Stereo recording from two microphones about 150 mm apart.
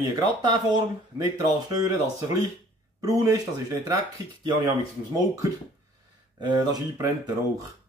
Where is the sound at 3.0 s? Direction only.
25° right (ahead or behind).